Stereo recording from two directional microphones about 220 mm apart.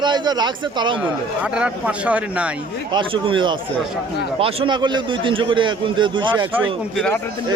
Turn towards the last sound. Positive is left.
turn(degrees=-10)  # may be behind; listen again after turning